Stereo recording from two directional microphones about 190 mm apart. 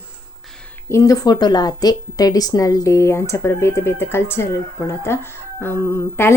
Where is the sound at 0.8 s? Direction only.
15° left (ahead or behind).